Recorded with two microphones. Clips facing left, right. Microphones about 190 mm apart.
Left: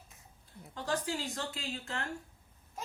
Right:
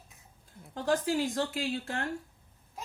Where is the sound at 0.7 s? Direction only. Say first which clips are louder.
Right 6 dB; 50° right (ahead or behind).